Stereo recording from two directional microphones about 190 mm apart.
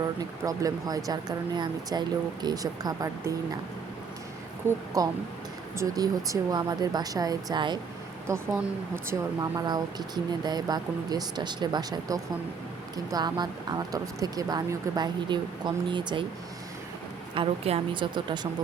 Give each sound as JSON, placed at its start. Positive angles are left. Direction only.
{"t": 0.0, "sound": "speech", "side_deg": -20}
{"t": 5.0, "sound": "speech", "side_deg": -20}
{"t": 17.3, "sound": "speech", "side_deg": -30}